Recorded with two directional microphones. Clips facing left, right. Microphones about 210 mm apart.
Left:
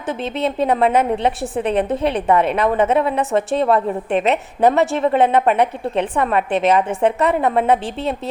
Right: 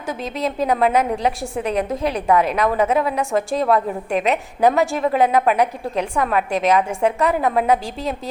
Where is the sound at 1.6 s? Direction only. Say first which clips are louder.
Left 3 dB; 30° left (ahead or behind).